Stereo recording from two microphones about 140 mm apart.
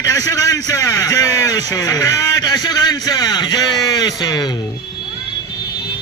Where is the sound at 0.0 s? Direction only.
25° left (ahead or behind).